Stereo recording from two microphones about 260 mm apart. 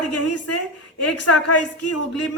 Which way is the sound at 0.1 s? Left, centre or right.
Left.